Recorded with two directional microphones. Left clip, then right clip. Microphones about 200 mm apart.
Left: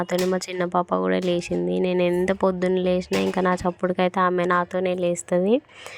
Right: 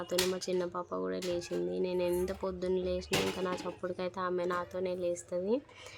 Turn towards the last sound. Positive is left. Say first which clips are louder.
# left 12 dB
turn(degrees=35)  # may be behind; listen again after turning